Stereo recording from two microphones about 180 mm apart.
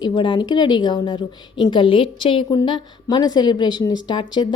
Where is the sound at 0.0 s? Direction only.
25° left (ahead or behind).